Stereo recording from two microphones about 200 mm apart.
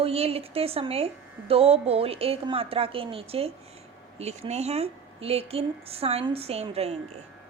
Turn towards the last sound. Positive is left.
turn(degrees=-30)  # may be behind; listen again after turning